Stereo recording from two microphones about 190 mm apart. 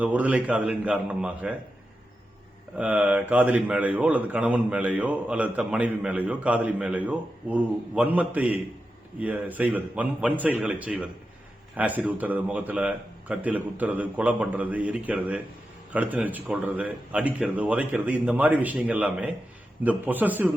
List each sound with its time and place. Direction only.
0.0 s speech: 10° right (ahead or behind)
2.7 s speech: 5° right (ahead or behind)